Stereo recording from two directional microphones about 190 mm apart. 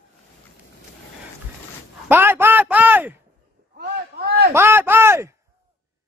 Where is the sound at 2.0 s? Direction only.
10° right (ahead or behind).